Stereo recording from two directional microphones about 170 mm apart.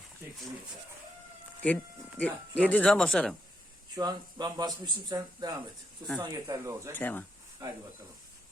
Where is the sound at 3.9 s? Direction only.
25° right (ahead or behind).